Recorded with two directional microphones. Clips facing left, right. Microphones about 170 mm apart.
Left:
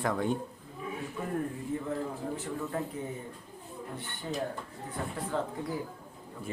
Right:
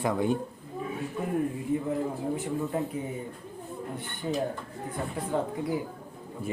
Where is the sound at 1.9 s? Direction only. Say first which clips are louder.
Right 5 dB; 15° right (ahead or behind).